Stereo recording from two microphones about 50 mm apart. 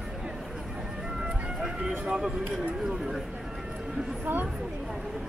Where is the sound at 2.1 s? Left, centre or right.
Centre.